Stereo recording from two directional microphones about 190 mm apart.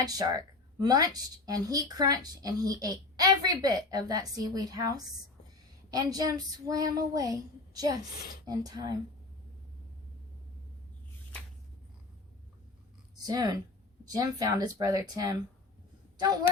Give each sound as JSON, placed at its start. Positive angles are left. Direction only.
{"t": 0.0, "sound": "speech", "side_deg": -20}
{"t": 13.2, "sound": "speech", "side_deg": -20}